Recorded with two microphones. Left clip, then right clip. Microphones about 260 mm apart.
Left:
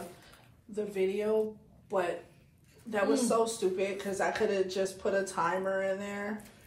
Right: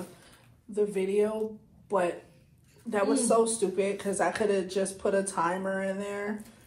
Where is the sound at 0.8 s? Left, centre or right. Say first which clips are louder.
Right 5 dB; right.